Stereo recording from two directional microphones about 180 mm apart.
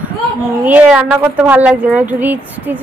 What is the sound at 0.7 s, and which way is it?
A woman's voice, 5° right (ahead or behind).